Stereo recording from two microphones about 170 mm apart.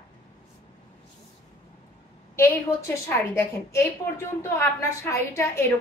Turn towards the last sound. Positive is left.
turn(degrees=15)  # may be behind; listen again after turning